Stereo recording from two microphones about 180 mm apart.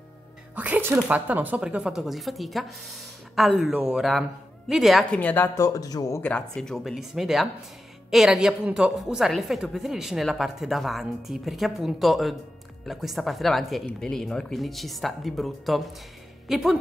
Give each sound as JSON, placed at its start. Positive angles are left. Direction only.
{"t": 0.6, "sound": "a woman's voice", "side_deg": -10}
{"t": 6.3, "sound": "a woman's voice", "side_deg": 0}